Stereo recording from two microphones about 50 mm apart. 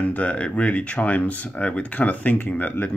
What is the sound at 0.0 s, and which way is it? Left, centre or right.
Speech, left.